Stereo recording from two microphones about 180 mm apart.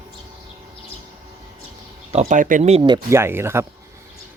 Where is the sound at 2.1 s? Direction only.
40° right (ahead or behind); by 3.6 s 15° right (ahead or behind).